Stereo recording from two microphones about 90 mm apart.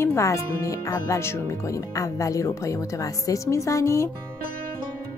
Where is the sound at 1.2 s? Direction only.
30° left (ahead or behind).